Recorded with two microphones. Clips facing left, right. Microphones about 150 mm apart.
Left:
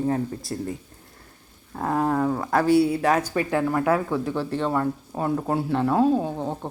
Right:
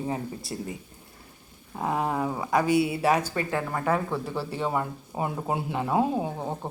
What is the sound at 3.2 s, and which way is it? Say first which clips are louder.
Speech: left 5 dB; 15° left (ahead or behind).